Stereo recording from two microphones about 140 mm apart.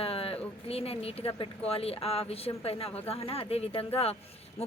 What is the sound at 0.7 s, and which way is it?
Speech, 45° left (ahead or behind).